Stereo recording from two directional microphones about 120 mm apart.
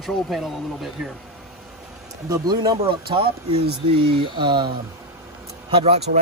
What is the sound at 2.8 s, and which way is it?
Speech, 50° right (ahead or behind).